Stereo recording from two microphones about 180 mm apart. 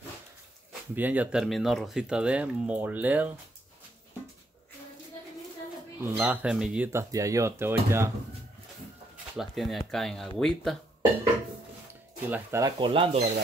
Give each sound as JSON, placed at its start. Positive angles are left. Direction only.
{"t": 0.9, "sound": "speech", "side_deg": -10}
{"t": 6.0, "sound": "speech", "side_deg": -10}
{"t": 9.4, "sound": "speech", "side_deg": 0}
{"t": 12.3, "sound": "speech", "side_deg": -15}
{"t": 12.7, "sound": "speech", "side_deg": -30}